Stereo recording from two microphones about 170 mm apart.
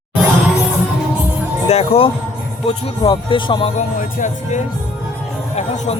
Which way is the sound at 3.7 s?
50° left (ahead or behind).